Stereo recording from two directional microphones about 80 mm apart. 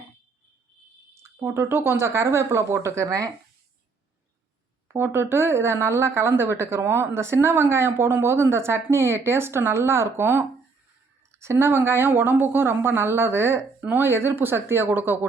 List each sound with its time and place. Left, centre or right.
1.1 s speech: right
4.9 s a woman's voice: right